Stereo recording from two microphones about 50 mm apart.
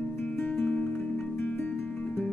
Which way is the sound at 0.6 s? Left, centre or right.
Left.